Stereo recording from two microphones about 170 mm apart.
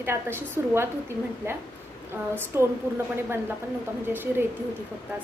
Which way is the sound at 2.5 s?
15° right (ahead or behind).